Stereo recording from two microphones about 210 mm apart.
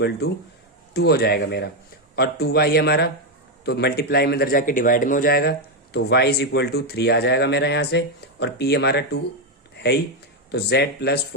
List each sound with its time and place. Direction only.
0.9 s a man's voice: 50° left (ahead or behind)